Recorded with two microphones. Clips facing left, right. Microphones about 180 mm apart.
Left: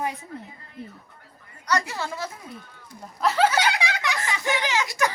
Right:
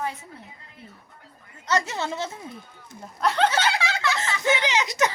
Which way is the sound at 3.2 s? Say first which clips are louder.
Left 1 dB; 5° left (ahead or behind).